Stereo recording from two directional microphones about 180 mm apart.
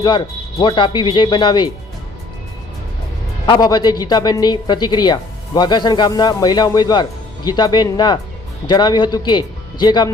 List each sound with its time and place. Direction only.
0.6 s a woman's voice: 25° left (ahead or behind)
3.4 s a woman's voice: 25° left (ahead or behind)